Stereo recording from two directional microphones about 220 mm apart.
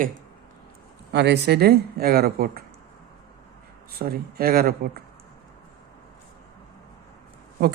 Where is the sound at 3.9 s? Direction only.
45° right (ahead or behind).